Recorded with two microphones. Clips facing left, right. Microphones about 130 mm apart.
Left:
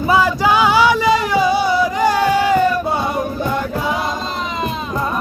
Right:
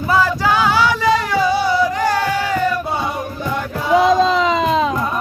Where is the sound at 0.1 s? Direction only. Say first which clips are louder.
Left 1 dB; 15° left (ahead or behind).